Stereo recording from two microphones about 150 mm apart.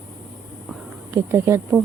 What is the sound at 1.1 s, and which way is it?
Speech, 15° right (ahead or behind).